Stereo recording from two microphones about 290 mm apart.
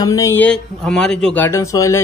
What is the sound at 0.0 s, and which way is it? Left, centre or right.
Speech, centre.